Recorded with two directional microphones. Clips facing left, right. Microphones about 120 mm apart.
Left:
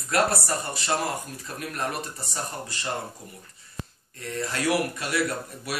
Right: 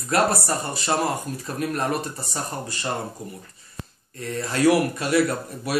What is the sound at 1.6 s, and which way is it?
Speech, 35° right (ahead or behind).